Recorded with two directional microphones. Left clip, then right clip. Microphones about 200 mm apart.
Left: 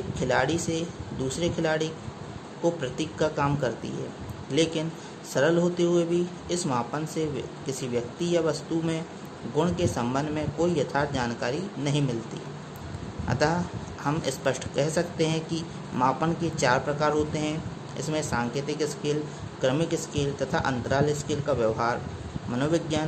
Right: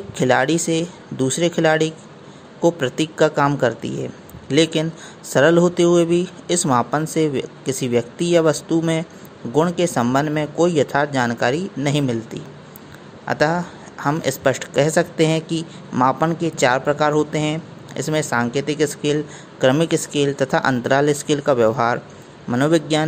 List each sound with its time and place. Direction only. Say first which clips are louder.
0.1 s speech: right 9 dB; 35° right (ahead or behind)
13.3 s speech: right 7 dB; 30° right (ahead or behind)